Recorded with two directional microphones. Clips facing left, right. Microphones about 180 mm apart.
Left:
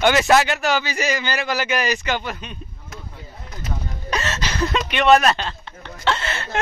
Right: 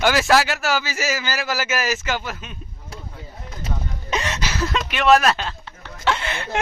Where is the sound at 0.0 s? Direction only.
Centre (ahead or behind).